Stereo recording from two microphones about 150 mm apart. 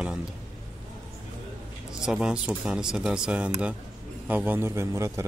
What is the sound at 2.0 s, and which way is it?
Speech, 5° right (ahead or behind).